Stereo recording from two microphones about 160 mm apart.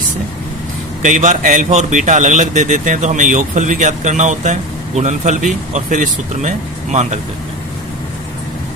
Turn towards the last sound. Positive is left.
turn(degrees=-45)  # may be behind; listen again after turning